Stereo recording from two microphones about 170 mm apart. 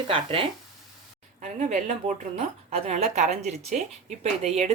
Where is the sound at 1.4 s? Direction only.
45° right (ahead or behind).